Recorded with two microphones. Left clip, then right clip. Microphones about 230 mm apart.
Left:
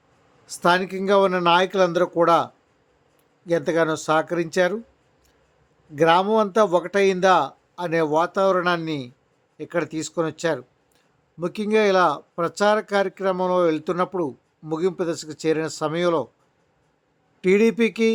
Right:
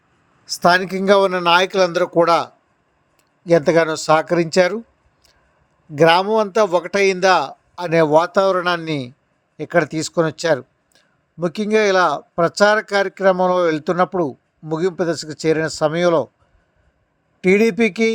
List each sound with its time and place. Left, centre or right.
0.4 s a man's voice: right
6.0 s a man's voice: centre
17.4 s speech: centre